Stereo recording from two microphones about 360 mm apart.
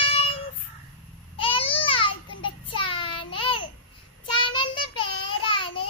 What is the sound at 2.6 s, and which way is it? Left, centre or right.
Child singing, centre.